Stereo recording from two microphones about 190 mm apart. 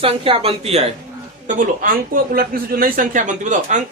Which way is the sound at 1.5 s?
45° right (ahead or behind).